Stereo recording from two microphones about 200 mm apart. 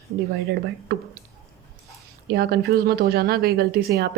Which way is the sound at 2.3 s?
50° right (ahead or behind).